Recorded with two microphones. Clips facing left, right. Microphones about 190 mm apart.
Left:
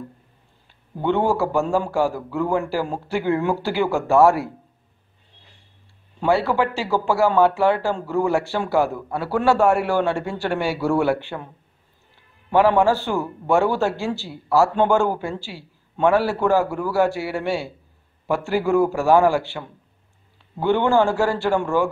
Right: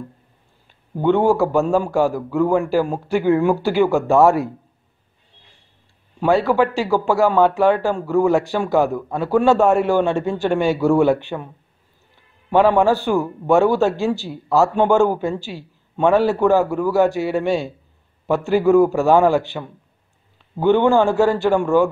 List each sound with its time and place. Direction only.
1.0 s speech: 15° right (ahead or behind)
6.2 s speech: 15° right (ahead or behind)
12.4 s a man's voice: 20° right (ahead or behind)